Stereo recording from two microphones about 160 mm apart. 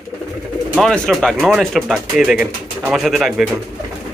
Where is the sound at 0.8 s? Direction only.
5° left (ahead or behind).